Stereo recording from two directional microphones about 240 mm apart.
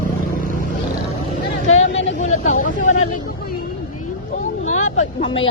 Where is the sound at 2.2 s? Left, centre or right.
Left.